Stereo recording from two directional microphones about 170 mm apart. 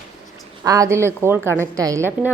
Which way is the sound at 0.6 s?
20° right (ahead or behind).